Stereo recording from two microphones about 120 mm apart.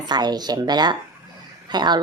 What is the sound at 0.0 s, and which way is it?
A woman's voice, 35° right (ahead or behind).